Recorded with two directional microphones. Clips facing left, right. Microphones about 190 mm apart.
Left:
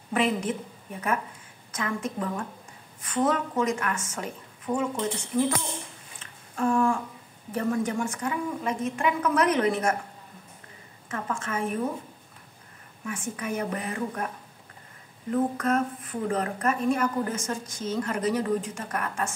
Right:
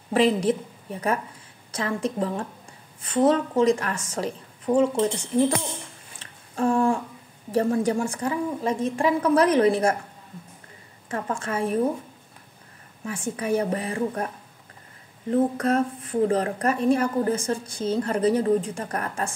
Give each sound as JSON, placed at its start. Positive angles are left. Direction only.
{"t": 0.1, "sound": "a woman's voice", "side_deg": -35}
{"t": 1.7, "sound": "a woman's voice", "side_deg": -30}
{"t": 6.5, "sound": "a sound", "side_deg": -30}
{"t": 7.5, "sound": "a woman's voice", "side_deg": -35}
{"t": 11.1, "sound": "a woman's voice", "side_deg": -35}
{"t": 13.0, "sound": "a woman's voice", "side_deg": -30}
{"t": 15.3, "sound": "a woman's voice", "side_deg": -35}